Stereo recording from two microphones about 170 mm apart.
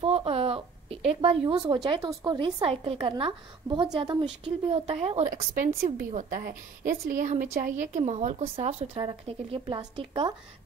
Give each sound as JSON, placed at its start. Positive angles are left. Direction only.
{"t": 0.0, "sound": "a woman's voice", "side_deg": -35}
{"t": 5.3, "sound": "a woman's voice", "side_deg": -55}
{"t": 8.9, "sound": "speech", "side_deg": -30}